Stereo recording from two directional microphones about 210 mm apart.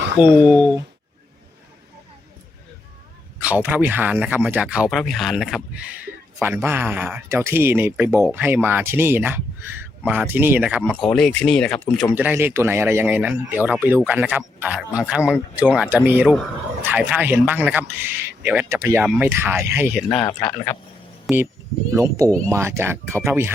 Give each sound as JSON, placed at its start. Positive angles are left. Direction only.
{"t": 0.2, "sound": "speech", "side_deg": 20}
{"t": 3.4, "sound": "speech", "side_deg": -5}
{"t": 12.1, "sound": "speech", "side_deg": -10}
{"t": 21.9, "sound": "speech", "side_deg": -15}